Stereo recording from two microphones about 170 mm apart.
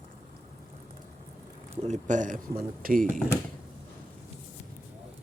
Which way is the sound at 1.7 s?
40° right (ahead or behind).